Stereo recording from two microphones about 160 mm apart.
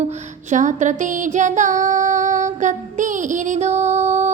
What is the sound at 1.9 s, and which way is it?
Music, 50° right (ahead or behind).